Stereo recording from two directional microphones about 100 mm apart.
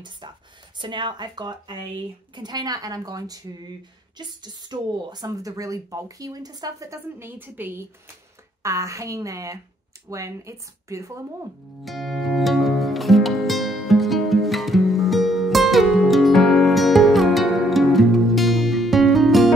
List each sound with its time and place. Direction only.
0.7 s speech: 55° right (ahead or behind); by 7.8 s 20° right (ahead or behind)
8.6 s speech: 30° right (ahead or behind)
11.8 s music: centre (ahead or behind)